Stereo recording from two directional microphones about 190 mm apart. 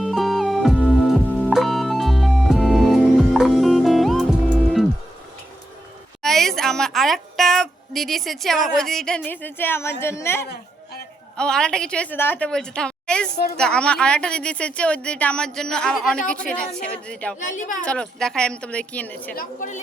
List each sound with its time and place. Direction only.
0.0 s music: centre (ahead or behind)
6.2 s a sound: centre (ahead or behind)
10.0 s a woman's voice: 15° left (ahead or behind)
17.4 s a woman's voice: 40° left (ahead or behind)
17.8 s a woman's voice: 5° left (ahead or behind)
19.4 s a woman's voice: 45° left (ahead or behind)